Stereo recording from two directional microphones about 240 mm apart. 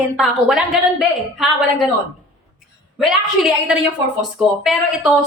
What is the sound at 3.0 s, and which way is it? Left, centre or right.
A woman's voice, centre.